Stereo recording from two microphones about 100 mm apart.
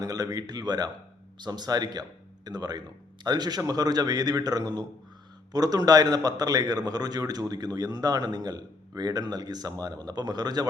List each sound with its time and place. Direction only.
0.0 s a man's voice: 40° right (ahead or behind)